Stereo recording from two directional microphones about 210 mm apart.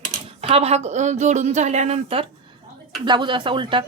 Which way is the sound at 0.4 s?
30° right (ahead or behind).